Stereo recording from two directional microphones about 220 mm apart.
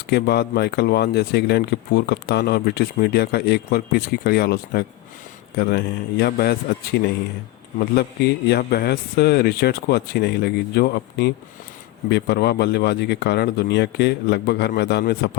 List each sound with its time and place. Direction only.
0.1 s speech: 50° left (ahead or behind)